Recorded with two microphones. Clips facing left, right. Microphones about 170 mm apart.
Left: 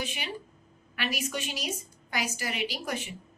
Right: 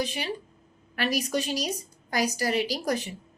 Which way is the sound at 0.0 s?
35° right (ahead or behind).